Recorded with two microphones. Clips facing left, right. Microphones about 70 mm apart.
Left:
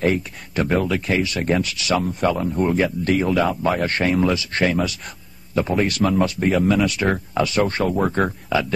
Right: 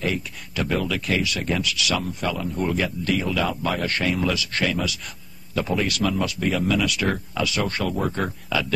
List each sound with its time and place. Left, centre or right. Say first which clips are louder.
0.0 s speech: left 6 dB; left